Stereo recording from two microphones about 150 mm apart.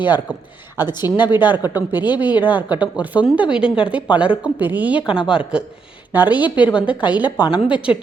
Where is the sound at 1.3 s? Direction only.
10° right (ahead or behind).